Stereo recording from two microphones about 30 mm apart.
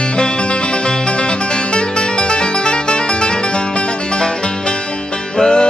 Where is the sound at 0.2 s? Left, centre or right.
Left.